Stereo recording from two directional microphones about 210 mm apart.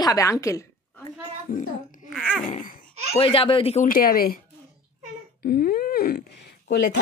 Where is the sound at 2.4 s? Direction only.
40° left (ahead or behind).